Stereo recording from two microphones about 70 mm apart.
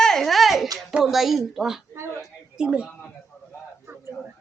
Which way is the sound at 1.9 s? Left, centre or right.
Right.